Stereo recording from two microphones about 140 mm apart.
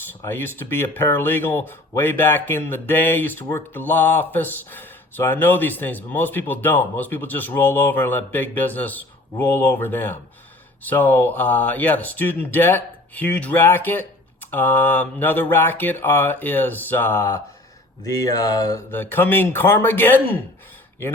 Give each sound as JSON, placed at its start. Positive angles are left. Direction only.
{"t": 0.3, "sound": "speech", "side_deg": 15}
{"t": 18.0, "sound": "mantra", "side_deg": 25}
{"t": 18.9, "sound": "speech", "side_deg": 15}